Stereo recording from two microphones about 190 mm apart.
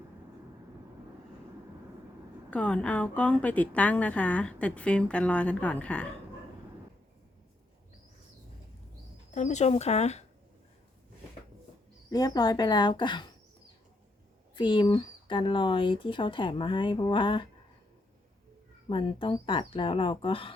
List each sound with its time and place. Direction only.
2.5 s a woman's voice: 5° left (ahead or behind)
9.3 s speech: 40° left (ahead or behind)
12.1 s speech: 20° left (ahead or behind)
14.5 s speech: 25° left (ahead or behind)
18.9 s speech: 25° left (ahead or behind)